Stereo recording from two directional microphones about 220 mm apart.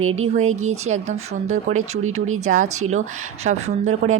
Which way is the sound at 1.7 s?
75° right (ahead or behind).